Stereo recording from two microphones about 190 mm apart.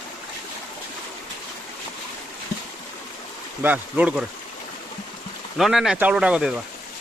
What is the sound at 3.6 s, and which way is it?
Speech, 10° right (ahead or behind).